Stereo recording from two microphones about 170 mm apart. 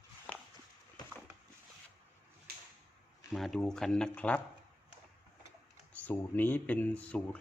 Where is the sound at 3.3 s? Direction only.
Centre (ahead or behind).